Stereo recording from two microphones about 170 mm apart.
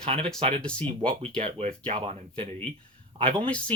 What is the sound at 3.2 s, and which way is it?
Speech, 10° left (ahead or behind).